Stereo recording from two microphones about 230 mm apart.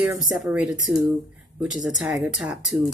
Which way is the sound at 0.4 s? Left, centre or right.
Centre.